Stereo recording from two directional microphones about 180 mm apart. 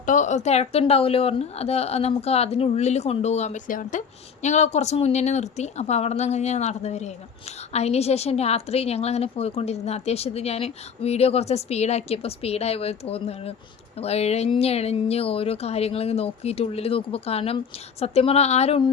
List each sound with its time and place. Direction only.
0.0 s a woman's voice: 45° left (ahead or behind)